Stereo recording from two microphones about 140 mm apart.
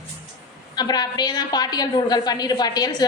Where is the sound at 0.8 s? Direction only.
30° left (ahead or behind).